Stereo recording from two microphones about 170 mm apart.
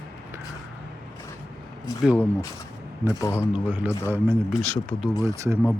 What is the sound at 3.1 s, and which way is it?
Speech, 15° left (ahead or behind).